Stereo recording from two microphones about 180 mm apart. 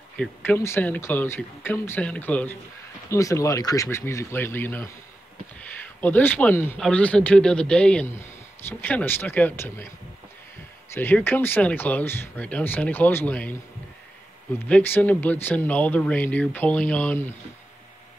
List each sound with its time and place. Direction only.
0.2 s a man's voice: 10° left (ahead or behind)
5.9 s a man's voice: 10° left (ahead or behind)
10.9 s a man's voice: 10° left (ahead or behind)
14.7 s a man's voice: 10° left (ahead or behind)